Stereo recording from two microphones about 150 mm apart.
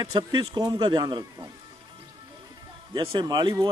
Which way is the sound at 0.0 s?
30° right (ahead or behind).